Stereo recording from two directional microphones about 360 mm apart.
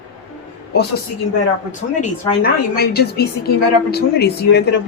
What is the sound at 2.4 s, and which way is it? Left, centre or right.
Speech, left.